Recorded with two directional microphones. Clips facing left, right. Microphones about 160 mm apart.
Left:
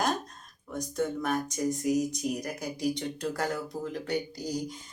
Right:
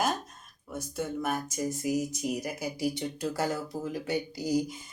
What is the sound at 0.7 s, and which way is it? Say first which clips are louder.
Speech: left 3 dB; 5° right (ahead or behind).